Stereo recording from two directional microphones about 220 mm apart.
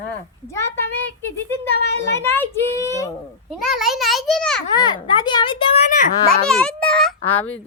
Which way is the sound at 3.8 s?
Centre (ahead or behind).